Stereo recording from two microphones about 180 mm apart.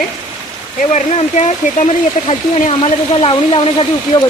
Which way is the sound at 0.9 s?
35° left (ahead or behind).